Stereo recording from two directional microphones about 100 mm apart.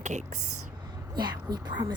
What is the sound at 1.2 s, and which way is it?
Speech, 45° right (ahead or behind).